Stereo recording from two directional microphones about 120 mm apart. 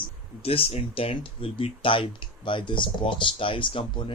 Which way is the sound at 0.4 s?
55° left (ahead or behind).